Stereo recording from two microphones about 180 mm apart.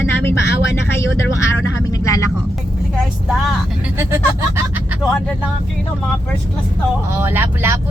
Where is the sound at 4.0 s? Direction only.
15° right (ahead or behind).